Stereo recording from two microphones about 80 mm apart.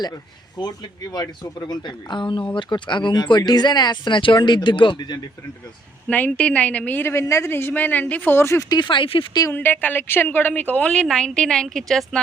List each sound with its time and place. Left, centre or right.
0.6 s speech: left
2.6 s speech: left
6.1 s a woman's voice: centre
8.8 s speech: left
9.5 s a woman's voice: left; by 12.2 s centre